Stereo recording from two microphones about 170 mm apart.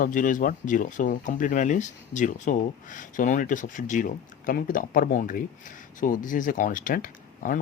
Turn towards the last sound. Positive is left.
turn(degrees=55)  # may be behind; listen again after turning